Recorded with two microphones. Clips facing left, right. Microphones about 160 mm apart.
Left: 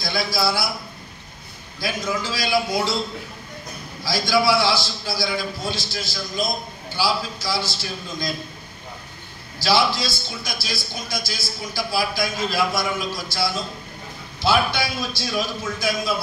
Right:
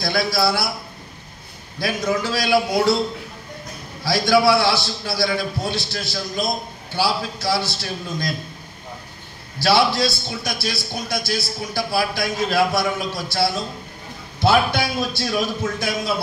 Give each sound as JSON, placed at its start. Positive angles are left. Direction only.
{"t": 0.0, "sound": "a man's voice", "side_deg": -60}
{"t": 1.8, "sound": "a man's voice", "side_deg": -65}
{"t": 4.0, "sound": "a man's voice", "side_deg": -60}
{"t": 9.6, "sound": "a man's voice", "side_deg": -65}